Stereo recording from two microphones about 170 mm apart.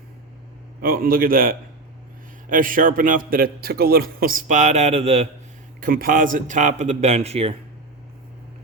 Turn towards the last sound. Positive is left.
turn(degrees=-35)  # may be behind; listen again after turning